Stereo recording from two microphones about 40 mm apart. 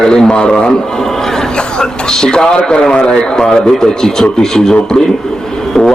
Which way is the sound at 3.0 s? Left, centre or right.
Centre.